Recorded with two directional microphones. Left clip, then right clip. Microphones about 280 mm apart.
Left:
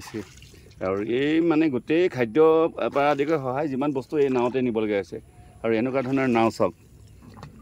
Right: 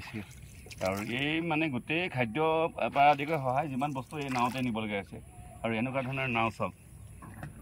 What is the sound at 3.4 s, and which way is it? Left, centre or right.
Speech, left.